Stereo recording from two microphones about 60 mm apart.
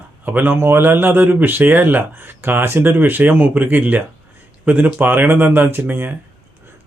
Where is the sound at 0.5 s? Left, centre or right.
Right.